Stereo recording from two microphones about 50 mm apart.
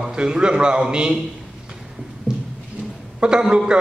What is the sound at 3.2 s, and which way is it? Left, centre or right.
Speech, centre.